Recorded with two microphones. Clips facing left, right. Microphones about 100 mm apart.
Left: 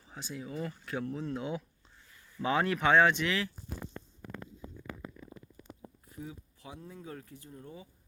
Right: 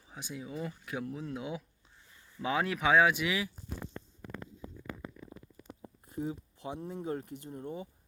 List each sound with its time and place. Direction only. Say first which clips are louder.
0.0 s speech: left 1 dB; 15° right (ahead or behind)
6.1 s speech: right 9 dB; 30° right (ahead or behind)